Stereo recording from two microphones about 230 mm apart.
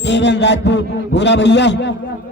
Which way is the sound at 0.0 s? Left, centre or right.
Left.